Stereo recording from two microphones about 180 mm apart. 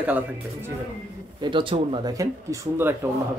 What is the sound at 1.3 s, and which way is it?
Speech, 25° right (ahead or behind).